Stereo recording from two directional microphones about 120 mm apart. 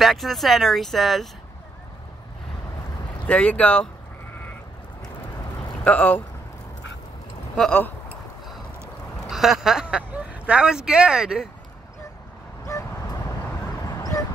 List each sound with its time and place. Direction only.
0.0 s speech: centre (ahead or behind)
3.3 s speech: 10° left (ahead or behind)
5.9 s speech: 15° left (ahead or behind)
9.3 s speech: centre (ahead or behind)
12.6 s dog: 25° left (ahead or behind)